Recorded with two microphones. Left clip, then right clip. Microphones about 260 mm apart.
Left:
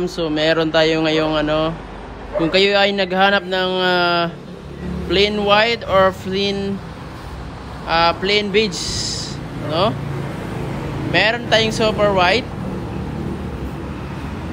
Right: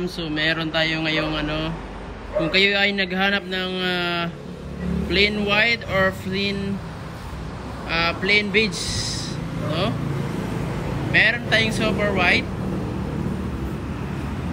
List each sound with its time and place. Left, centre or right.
0.0 s speech: centre
7.9 s speech: centre
8.9 s speech: left
9.7 s speech: centre
11.1 s speech: centre